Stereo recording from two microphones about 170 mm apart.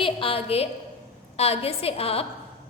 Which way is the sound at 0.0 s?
30° left (ahead or behind).